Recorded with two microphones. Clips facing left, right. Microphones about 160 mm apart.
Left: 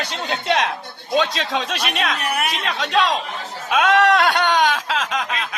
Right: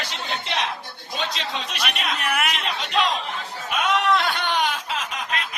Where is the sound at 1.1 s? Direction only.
90° left.